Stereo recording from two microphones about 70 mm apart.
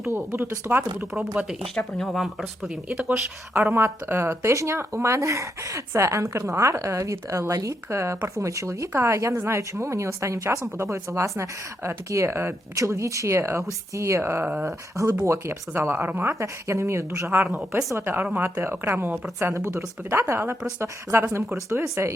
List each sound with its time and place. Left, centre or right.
0.3 s speech: right
1.7 s speech: centre
3.1 s speech: right
3.8 s speech: right
12.7 s speech: right
16.3 s speech: right
17.9 s speech: right
19.4 s speech: right
20.8 s speech: right
22.0 s speech: right